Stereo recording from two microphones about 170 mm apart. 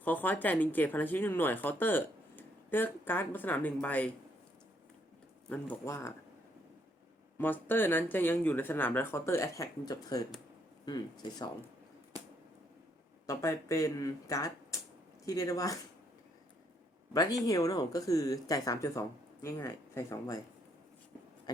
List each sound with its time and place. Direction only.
0.0 s speech: 10° left (ahead or behind)
5.5 s speech: 15° left (ahead or behind)
7.3 s speech: 10° left (ahead or behind)
13.2 s speech: 15° left (ahead or behind)
17.2 s speech: 25° left (ahead or behind)